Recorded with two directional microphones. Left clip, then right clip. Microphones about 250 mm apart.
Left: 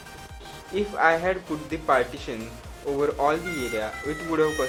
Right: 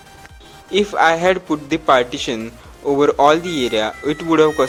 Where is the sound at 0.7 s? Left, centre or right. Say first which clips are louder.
Right 7 dB; right.